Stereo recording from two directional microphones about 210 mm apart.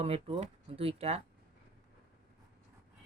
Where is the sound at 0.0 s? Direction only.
25° right (ahead or behind).